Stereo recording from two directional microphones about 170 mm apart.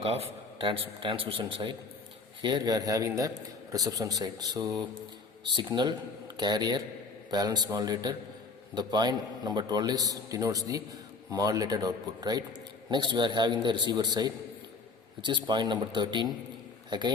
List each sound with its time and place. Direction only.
0.0 s a man's voice: 35° right (ahead or behind)